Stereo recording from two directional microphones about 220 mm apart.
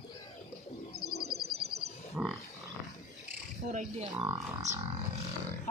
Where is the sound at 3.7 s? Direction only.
35° right (ahead or behind).